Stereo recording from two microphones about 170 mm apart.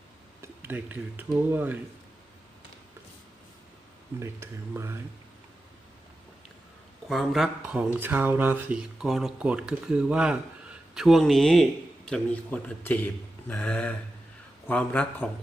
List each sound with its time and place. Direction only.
0.6 s speech: 10° right (ahead or behind)
4.2 s speech: 15° right (ahead or behind)
7.1 s speech: centre (ahead or behind)